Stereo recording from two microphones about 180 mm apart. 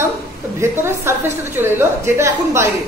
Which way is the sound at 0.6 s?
15° right (ahead or behind).